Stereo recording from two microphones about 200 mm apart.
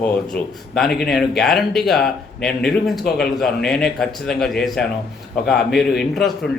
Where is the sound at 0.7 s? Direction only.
Centre (ahead or behind).